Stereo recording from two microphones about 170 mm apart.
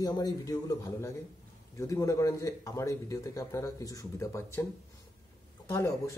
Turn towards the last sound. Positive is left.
turn(degrees=15)  # may be behind; listen again after turning